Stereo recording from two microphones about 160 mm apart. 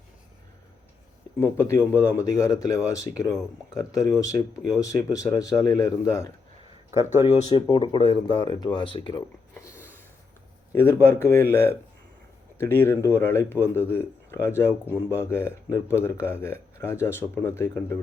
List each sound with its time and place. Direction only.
1.4 s speech: 15° left (ahead or behind)
6.9 s speech: 15° right (ahead or behind)
7.3 s speech: 45° left (ahead or behind)
7.7 s speech: 30° left (ahead or behind)
9.6 s a sound: 15° left (ahead or behind)
10.7 s speech: 15° left (ahead or behind)